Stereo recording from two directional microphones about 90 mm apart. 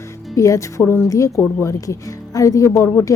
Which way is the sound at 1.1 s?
40° left (ahead or behind).